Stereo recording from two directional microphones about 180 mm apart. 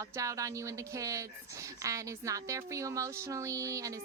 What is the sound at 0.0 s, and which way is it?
A woman's voice, 20° right (ahead or behind).